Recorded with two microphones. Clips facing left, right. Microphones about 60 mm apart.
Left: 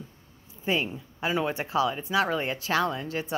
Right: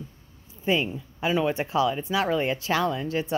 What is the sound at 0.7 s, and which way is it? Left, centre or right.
Speech, centre.